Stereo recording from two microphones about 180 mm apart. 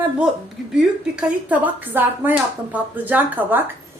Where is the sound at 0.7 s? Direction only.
5° right (ahead or behind).